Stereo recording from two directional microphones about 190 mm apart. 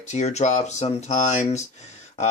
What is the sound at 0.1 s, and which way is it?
Speech, 35° left (ahead or behind).